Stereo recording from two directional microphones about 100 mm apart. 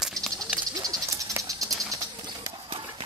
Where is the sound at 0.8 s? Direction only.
35° right (ahead or behind).